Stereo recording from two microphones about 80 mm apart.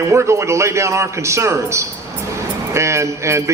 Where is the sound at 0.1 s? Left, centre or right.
Right.